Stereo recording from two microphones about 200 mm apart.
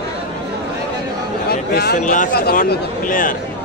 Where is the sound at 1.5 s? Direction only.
55° left (ahead or behind).